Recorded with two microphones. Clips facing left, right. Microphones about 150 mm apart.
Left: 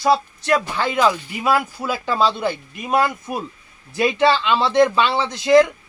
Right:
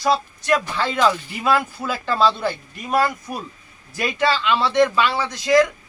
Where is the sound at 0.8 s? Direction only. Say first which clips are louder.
Even; 10° left (ahead or behind).